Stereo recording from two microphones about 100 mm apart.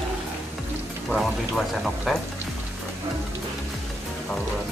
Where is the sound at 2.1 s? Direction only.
Centre (ahead or behind).